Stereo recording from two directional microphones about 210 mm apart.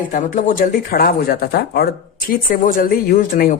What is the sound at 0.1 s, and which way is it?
Speech, 40° left (ahead or behind).